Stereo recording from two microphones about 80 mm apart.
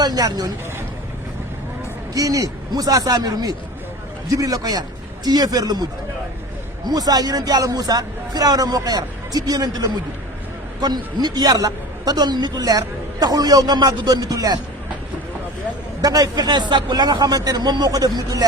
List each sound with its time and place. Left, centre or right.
0.0 s a man's voice: right
2.1 s speech: right
6.8 s a man's voice: right
16.0 s a man's voice: right